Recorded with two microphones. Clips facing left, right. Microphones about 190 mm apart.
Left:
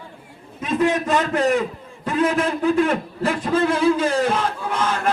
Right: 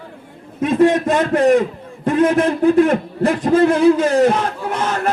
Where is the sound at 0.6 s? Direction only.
50° right (ahead or behind).